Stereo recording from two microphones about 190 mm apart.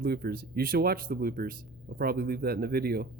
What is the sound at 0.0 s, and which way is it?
Speech, 55° right (ahead or behind).